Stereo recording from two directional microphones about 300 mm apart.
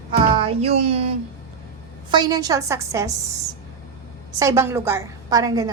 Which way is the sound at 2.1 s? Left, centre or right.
Centre.